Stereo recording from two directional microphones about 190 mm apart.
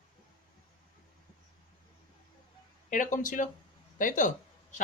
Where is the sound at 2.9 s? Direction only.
45° left (ahead or behind).